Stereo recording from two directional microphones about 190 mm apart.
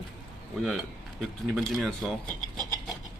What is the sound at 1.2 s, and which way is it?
Speech, centre (ahead or behind).